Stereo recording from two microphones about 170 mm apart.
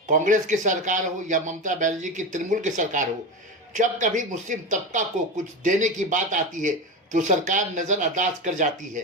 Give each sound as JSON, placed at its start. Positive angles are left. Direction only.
{"t": 0.1, "sound": "speech", "side_deg": -50}